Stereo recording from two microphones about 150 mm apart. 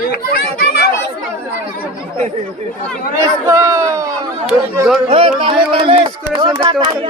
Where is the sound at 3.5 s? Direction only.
20° right (ahead or behind).